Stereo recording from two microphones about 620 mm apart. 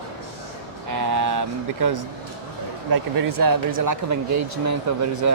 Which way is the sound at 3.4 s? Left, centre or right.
Right.